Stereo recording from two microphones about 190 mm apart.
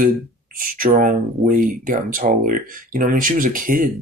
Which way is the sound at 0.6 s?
45° right (ahead or behind).